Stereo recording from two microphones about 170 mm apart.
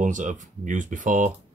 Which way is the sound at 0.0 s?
50° right (ahead or behind).